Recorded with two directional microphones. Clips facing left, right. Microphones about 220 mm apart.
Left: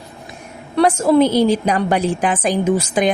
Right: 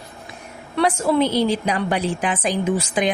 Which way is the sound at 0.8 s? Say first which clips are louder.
Left 5 dB; 45° left (ahead or behind).